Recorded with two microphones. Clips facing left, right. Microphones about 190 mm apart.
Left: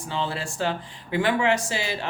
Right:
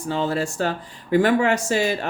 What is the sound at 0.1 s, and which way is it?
Speech, 45° right (ahead or behind).